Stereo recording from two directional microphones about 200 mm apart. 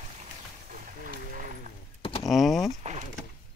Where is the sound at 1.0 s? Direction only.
40° right (ahead or behind).